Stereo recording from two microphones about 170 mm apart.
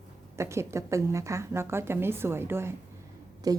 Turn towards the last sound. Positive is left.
turn(degrees=-20)  # may be behind; listen again after turning